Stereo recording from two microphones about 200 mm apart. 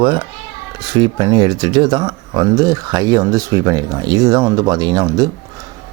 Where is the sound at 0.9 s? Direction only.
20° right (ahead or behind).